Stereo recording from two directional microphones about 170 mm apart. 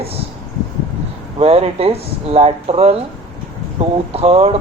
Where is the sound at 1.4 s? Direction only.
35° right (ahead or behind).